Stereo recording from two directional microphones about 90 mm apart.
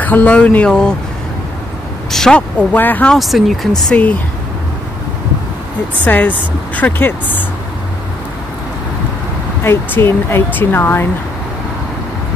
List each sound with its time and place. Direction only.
0.0 s speech: 20° left (ahead or behind)
2.0 s speech: 5° left (ahead or behind)
2.7 s speech: 20° left (ahead or behind)
3.1 s speech: centre (ahead or behind)
3.9 s speech: 15° left (ahead or behind)
6.0 s speech: 20° left (ahead or behind)
9.6 s speech: 25° left (ahead or behind)